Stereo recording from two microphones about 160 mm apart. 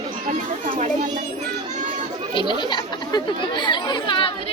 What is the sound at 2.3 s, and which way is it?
Speech, 30° left (ahead or behind).